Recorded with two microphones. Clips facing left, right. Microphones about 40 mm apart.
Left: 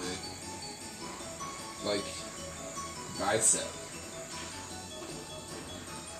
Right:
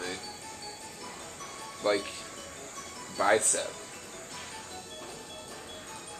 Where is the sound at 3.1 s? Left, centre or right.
Right.